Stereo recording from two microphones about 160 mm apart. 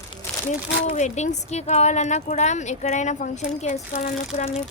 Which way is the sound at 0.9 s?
45° left (ahead or behind).